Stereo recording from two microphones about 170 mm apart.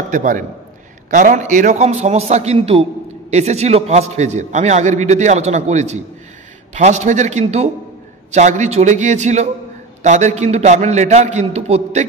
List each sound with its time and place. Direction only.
0.1 s a man's voice: 50° right (ahead or behind)